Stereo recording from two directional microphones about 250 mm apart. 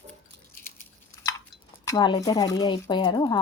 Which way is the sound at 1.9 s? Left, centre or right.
Centre.